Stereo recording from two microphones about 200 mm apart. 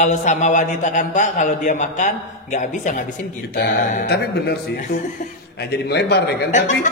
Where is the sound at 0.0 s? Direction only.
35° left (ahead or behind).